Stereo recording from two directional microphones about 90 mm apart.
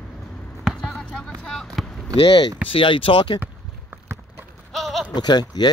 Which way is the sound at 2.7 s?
75° left (ahead or behind).